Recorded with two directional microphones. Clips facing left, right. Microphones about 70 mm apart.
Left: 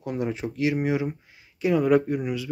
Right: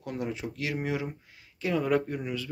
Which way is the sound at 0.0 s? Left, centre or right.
Left.